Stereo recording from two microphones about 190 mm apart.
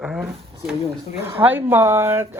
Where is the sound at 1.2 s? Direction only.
10° right (ahead or behind).